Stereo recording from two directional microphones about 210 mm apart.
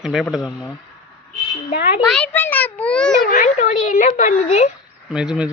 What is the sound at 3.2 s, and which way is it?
Speech, 35° left (ahead or behind).